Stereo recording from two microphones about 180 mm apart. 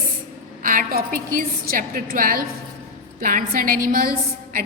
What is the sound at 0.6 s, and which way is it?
A woman's voice, 50° right (ahead or behind).